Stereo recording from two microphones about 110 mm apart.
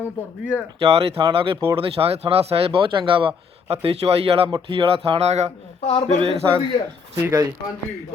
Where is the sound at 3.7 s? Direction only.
65° right (ahead or behind).